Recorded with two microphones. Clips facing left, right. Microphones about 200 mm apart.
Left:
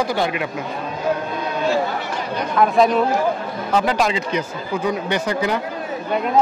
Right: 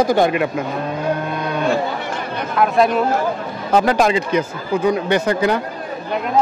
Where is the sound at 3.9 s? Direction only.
50° right (ahead or behind).